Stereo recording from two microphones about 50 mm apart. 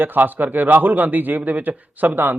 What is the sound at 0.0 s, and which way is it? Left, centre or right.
Speech, right.